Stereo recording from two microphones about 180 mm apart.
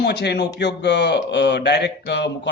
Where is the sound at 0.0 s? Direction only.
70° left (ahead or behind).